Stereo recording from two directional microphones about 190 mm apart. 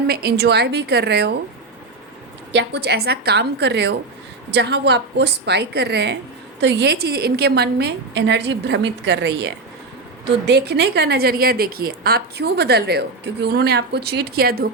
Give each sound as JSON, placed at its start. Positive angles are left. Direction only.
{"t": 0.1, "sound": "a woman's voice", "side_deg": -55}
{"t": 2.5, "sound": "a woman's voice", "side_deg": -65}